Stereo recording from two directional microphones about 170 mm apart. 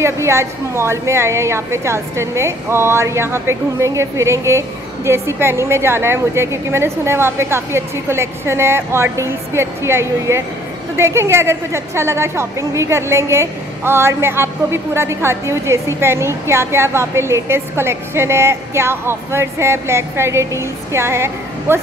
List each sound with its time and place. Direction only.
0.0 s a woman's voice: 15° right (ahead or behind)